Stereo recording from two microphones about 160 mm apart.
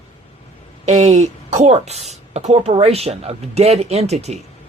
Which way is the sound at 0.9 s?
45° right (ahead or behind).